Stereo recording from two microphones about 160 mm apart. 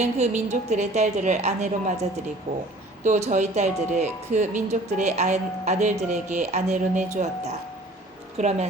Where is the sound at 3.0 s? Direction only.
50° right (ahead or behind).